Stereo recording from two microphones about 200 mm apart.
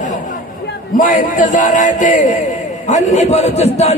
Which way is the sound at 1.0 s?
40° left (ahead or behind).